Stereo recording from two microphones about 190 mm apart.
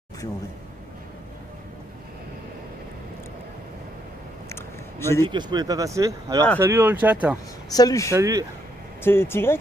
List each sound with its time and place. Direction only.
4.5 s a sound: 15° left (ahead or behind)
5.2 s speech: 20° right (ahead or behind); by 7.3 s 5° right (ahead or behind)
7.7 s speech: 20° left (ahead or behind)
8.1 s speech: 15° right (ahead or behind)
9.0 s speech: 10° left (ahead or behind)